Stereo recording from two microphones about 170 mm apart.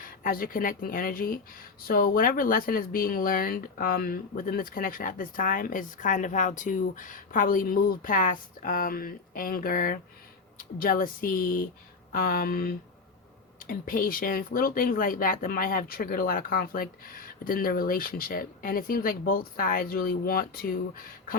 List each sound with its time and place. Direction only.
0.0 s speech: 55° left (ahead or behind)